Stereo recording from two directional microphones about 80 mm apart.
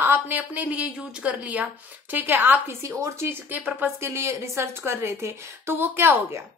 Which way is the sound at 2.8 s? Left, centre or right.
Right.